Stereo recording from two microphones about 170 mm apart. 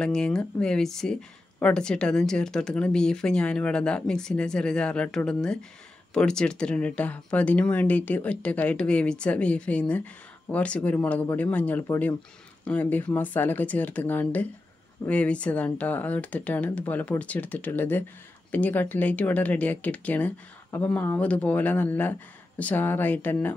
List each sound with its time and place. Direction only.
0.0 s speech: 5° left (ahead or behind)